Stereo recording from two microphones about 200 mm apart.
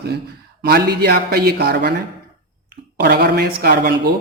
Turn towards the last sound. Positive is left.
turn(degrees=-50)  # may be behind; listen again after turning